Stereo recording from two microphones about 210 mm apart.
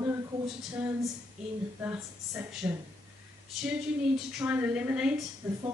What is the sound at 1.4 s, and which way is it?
A woman's voice, 5° right (ahead or behind).